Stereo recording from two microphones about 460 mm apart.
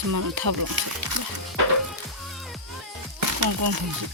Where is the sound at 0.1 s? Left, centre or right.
Right.